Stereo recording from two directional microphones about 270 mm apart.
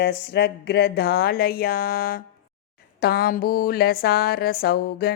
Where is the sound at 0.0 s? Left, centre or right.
Left.